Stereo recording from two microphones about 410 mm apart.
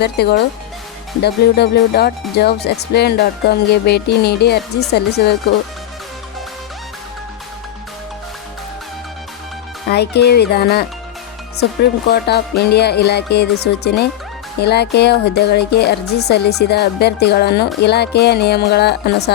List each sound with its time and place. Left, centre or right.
0.0 s speech: left
9.9 s speech: left